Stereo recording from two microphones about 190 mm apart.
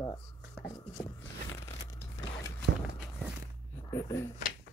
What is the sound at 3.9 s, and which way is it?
Speech, 15° left (ahead or behind).